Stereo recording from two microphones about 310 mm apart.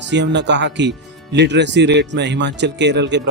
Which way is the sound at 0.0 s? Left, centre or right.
Right.